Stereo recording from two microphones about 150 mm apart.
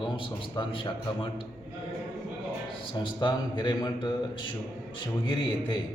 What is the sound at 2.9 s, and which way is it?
A man's voice, 30° left (ahead or behind).